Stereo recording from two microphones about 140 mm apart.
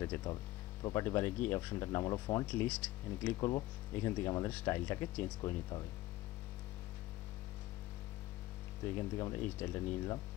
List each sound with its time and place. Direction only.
0.8 s speech: 20° left (ahead or behind)
2.4 s speech: 10° left (ahead or behind)
3.3 s speech: 30° left (ahead or behind)
8.8 s speech: 20° left (ahead or behind)